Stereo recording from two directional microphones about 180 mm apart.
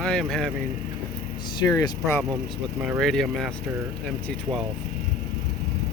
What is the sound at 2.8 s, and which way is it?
Speech, centre (ahead or behind).